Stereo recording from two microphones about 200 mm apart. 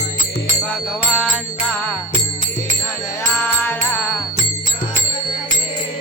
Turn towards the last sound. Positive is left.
turn(degrees=10)  # may be behind; listen again after turning